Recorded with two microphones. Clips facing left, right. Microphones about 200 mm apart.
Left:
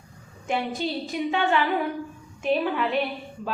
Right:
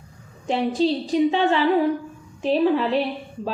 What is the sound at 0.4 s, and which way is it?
A woman's voice, 30° right (ahead or behind).